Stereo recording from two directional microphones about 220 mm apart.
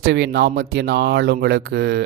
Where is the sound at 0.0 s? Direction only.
55° right (ahead or behind).